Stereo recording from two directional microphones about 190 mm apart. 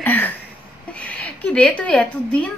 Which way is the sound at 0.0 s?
10° left (ahead or behind).